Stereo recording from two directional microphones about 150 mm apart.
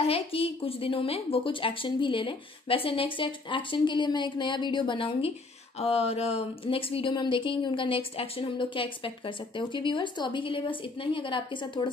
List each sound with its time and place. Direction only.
0.0 s speech: 40° left (ahead or behind)